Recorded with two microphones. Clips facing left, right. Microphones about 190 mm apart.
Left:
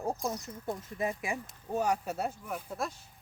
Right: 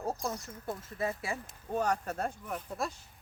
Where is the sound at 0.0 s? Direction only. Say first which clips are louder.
Left 1 dB; 15° left (ahead or behind).